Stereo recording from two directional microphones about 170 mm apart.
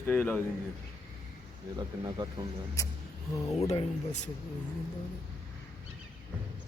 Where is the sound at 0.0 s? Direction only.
10° left (ahead or behind).